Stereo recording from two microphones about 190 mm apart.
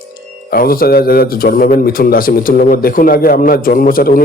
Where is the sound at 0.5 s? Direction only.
50° left (ahead or behind).